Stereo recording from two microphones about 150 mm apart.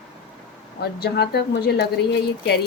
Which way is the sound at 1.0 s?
90° left.